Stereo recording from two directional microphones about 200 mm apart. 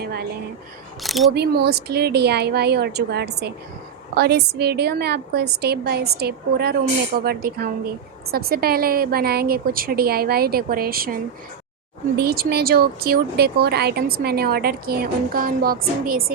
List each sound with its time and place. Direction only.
0.0 s speech: 50° right (ahead or behind)
1.0 s speech: centre (ahead or behind)
1.3 s speech: 55° right (ahead or behind)
12.2 s speech: 50° right (ahead or behind)